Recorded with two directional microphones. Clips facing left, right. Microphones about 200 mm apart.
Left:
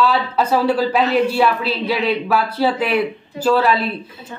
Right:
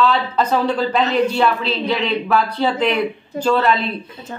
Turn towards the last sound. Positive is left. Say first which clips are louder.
# left 1 dB
turn(degrees=5)  # may be behind; listen again after turning